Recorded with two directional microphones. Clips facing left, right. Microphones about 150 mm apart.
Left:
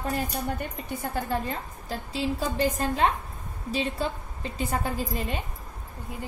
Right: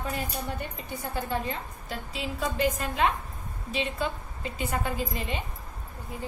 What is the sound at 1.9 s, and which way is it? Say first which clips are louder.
A woman's voice: left 6 dB; 35° left (ahead or behind).